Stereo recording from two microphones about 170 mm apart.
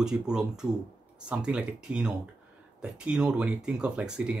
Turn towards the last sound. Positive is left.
turn(degrees=-5)  # may be behind; listen again after turning